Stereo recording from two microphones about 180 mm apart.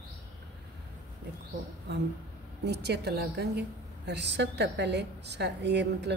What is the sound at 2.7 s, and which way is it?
A woman's voice, 65° right (ahead or behind).